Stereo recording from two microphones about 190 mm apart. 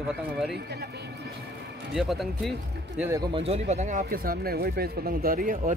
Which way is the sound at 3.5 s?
35° right (ahead or behind).